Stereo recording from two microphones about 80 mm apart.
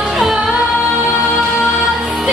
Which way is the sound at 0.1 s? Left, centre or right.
Centre.